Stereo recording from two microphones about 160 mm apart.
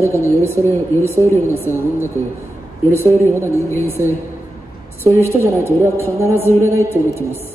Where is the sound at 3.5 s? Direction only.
15° left (ahead or behind).